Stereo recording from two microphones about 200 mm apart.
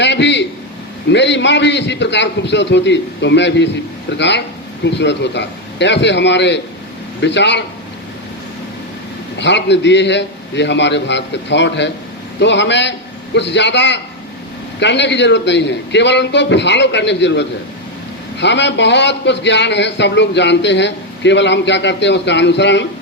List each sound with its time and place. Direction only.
0.0 s a sound: 60° left (ahead or behind)
1.1 s a man's voice: 60° left (ahead or behind)
9.4 s a man's voice: 60° left (ahead or behind)